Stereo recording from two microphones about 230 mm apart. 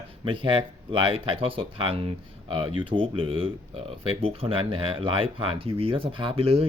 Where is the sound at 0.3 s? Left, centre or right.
Right.